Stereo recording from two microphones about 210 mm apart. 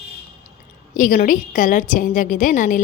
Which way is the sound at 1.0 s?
40° left (ahead or behind).